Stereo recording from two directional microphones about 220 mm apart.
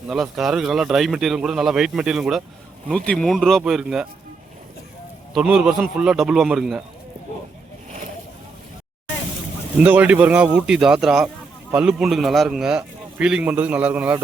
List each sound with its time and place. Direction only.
0.1 s a man's voice: centre (ahead or behind)
5.3 s a man's voice: centre (ahead or behind)
7.9 s vehicle: 35° right (ahead or behind)
9.7 s a man's voice: 5° right (ahead or behind)